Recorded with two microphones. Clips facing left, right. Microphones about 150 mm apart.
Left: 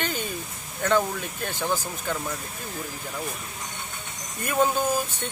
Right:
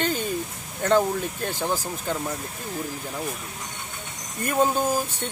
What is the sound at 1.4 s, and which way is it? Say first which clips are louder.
Speech: left 2 dB; 30° right (ahead or behind).